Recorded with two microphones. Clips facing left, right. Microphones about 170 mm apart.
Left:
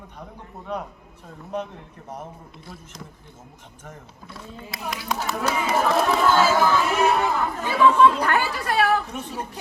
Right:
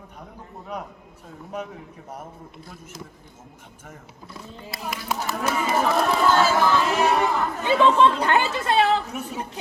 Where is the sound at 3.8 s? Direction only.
10° right (ahead or behind).